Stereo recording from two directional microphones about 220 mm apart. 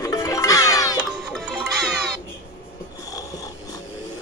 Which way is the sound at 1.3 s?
Centre (ahead or behind).